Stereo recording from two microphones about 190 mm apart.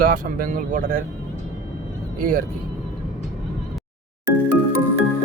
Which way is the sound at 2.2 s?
45° right (ahead or behind).